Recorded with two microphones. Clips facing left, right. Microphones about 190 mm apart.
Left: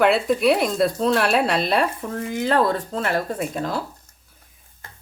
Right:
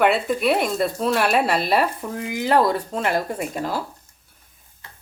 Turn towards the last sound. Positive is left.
turn(degrees=-5)  # may be behind; listen again after turning